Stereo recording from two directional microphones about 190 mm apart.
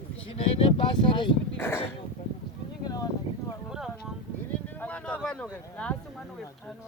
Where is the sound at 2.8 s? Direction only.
20° left (ahead or behind).